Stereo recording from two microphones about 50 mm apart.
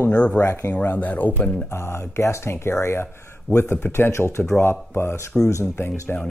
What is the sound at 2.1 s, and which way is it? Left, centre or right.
Speech, left.